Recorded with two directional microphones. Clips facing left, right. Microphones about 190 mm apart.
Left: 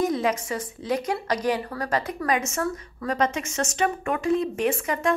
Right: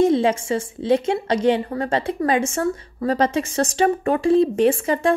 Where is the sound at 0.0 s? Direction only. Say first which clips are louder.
Right 7 dB; 30° right (ahead or behind).